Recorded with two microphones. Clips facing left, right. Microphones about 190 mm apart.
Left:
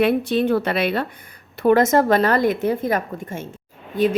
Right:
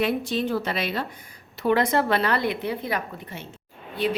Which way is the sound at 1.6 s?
45° left (ahead or behind).